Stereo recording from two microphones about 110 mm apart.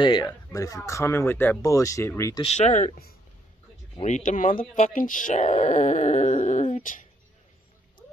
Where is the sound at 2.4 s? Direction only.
85° left.